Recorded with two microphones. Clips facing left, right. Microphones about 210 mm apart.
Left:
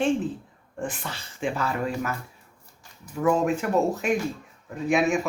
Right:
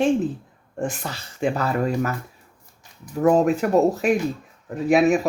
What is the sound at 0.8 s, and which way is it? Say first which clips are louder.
Speech: right 5 dB; 40° right (ahead or behind).